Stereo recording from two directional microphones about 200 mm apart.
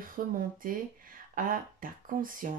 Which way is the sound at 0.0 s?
45° right (ahead or behind).